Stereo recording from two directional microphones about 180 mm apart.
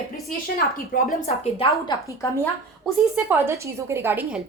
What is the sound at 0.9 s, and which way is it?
Speech, 50° left (ahead or behind).